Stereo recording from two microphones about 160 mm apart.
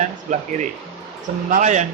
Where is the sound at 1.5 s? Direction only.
50° right (ahead or behind).